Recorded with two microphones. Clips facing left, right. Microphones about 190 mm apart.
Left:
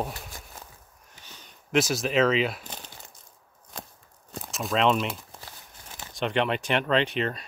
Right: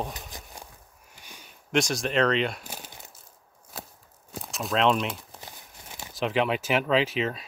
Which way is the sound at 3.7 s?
5° right (ahead or behind).